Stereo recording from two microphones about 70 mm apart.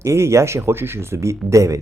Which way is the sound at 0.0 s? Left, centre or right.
Right.